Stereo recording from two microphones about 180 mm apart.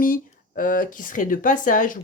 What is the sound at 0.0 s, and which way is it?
Speech, 50° left (ahead or behind).